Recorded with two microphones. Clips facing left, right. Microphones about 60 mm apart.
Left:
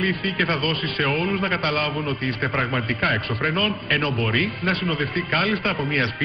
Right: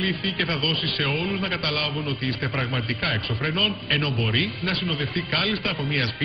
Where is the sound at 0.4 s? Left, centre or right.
Left.